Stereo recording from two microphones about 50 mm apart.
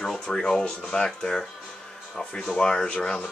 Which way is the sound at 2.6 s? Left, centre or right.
Centre.